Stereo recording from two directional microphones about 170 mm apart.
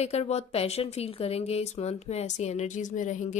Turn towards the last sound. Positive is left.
turn(degrees=45)  # may be behind; listen again after turning